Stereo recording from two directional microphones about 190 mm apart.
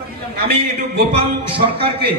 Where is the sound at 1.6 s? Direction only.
30° right (ahead or behind).